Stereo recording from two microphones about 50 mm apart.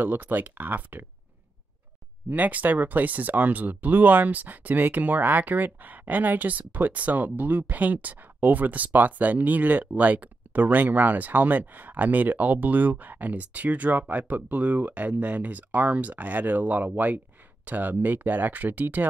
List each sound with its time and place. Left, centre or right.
0.0 s speech: right
2.2 s speech: right